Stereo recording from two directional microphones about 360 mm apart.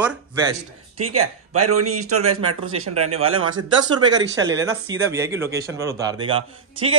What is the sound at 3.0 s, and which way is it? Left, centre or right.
A man's voice, centre.